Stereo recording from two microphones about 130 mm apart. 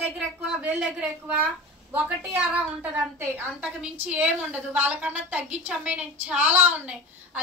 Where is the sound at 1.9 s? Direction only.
10° right (ahead or behind).